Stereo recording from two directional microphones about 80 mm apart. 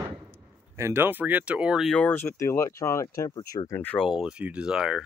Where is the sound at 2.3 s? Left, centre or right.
Left.